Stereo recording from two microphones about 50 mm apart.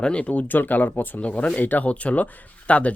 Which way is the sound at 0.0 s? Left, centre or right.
Left.